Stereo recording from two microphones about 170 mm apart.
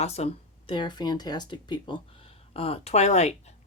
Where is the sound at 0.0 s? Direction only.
40° left (ahead or behind).